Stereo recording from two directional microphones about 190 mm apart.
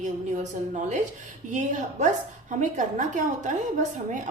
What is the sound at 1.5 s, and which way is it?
A woman's voice, 40° right (ahead or behind).